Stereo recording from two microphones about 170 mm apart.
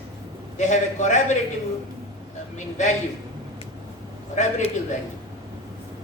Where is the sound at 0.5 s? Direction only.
45° left (ahead or behind).